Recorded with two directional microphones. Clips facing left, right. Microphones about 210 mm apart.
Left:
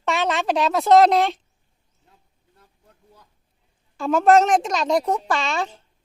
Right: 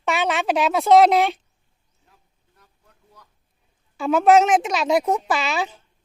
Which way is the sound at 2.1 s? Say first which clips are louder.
Left 2 dB; 25° left (ahead or behind).